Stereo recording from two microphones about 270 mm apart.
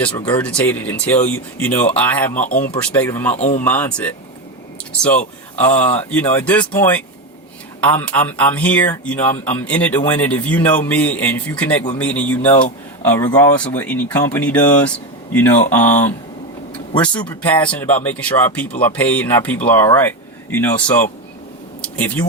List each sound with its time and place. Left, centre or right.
0.0 s speech: centre
20.7 s speech: centre
21.8 s a sound: centre